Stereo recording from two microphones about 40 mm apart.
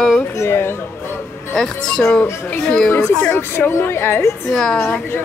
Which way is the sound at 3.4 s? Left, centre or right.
Left.